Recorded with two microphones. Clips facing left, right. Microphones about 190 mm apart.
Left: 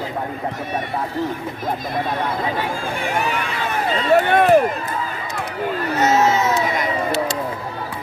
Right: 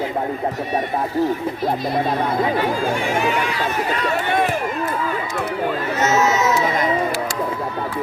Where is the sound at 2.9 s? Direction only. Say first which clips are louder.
Right 3 dB; 60° left (ahead or behind).